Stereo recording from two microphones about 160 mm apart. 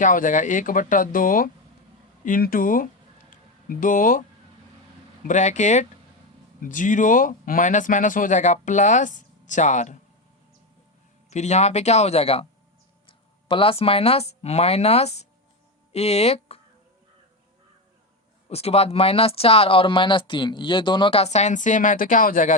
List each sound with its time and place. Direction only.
0.0 s speech: 55° left (ahead or behind)
5.3 s speech: 50° left (ahead or behind)
11.3 s speech: 45° left (ahead or behind)
18.4 s speech: 40° left (ahead or behind); by 22.5 s 55° left (ahead or behind)